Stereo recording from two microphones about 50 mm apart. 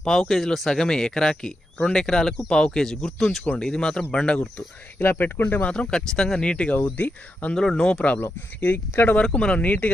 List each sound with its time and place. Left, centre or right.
0.0 s speech: centre
4.6 s speech: left
6.7 s speech: left
7.5 s speech: centre
8.5 s speech: left
9.2 s speech: left
9.6 s speech: left